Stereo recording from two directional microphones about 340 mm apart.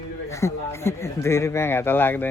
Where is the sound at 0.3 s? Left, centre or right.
Centre.